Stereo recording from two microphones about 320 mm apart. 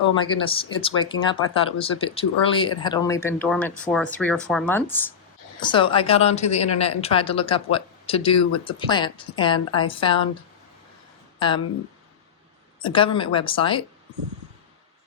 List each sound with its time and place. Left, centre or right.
0.5 s speech: centre
11.3 s speech: centre
12.8 s speech: centre